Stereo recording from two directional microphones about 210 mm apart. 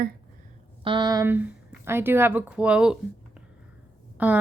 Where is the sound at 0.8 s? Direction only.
20° right (ahead or behind); by 2.9 s 5° right (ahead or behind).